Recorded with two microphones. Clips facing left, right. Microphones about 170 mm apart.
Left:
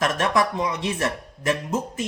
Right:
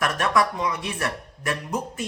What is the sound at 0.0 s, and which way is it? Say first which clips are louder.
A man's voice: left 1 dB; 25° left (ahead or behind).